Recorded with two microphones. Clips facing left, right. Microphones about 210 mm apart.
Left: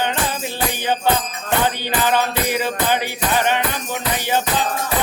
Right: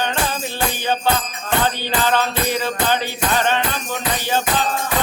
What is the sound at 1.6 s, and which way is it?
Music, 15° left (ahead or behind).